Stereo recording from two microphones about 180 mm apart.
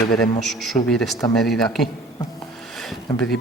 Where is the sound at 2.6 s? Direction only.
Centre (ahead or behind).